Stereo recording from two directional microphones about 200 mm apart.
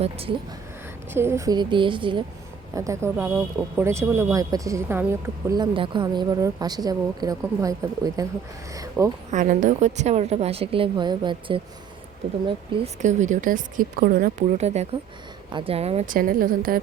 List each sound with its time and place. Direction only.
0.0 s a woman's voice: 30° right (ahead or behind)
1.1 s a woman's voice: 10° right (ahead or behind)
5.5 s a woman's voice: 25° right (ahead or behind)
9.3 s a woman's voice: 40° right (ahead or behind)
16.1 s a woman's voice: 45° right (ahead or behind)